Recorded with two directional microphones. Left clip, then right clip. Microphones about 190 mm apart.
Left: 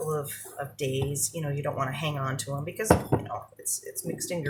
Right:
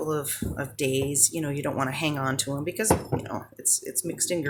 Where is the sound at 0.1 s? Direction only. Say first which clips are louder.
Right 3 dB; 40° right (ahead or behind).